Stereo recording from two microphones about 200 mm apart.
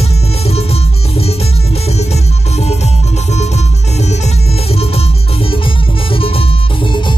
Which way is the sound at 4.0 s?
35° left (ahead or behind).